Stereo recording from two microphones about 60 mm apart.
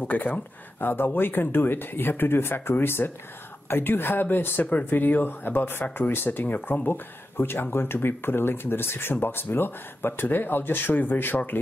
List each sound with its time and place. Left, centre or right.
0.0 s speech: left